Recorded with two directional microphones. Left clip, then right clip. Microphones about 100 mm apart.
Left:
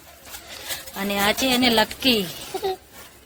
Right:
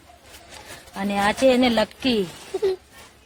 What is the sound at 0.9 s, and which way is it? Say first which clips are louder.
Speech: even; 55° right (ahead or behind).